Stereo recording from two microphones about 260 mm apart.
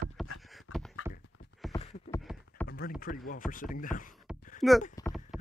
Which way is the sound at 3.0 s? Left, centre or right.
Left.